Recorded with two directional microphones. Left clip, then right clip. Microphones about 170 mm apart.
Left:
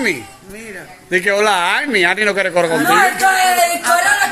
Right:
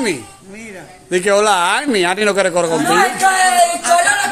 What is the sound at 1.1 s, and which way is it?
Speech, 15° right (ahead or behind).